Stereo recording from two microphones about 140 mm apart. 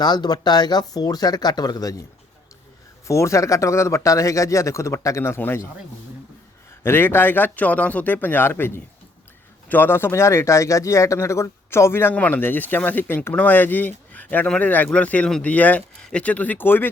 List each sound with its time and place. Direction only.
0.0 s speech: 30° left (ahead or behind)
3.1 s speech: 20° left (ahead or behind)
6.8 s speech: 15° left (ahead or behind)